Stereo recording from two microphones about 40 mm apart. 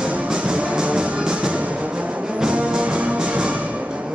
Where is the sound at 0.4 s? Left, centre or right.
Right.